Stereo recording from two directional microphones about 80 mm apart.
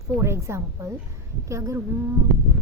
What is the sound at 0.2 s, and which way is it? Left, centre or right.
A woman's voice, right.